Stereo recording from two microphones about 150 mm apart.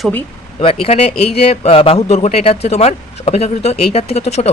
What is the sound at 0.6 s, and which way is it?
A man's voice, 40° left (ahead or behind).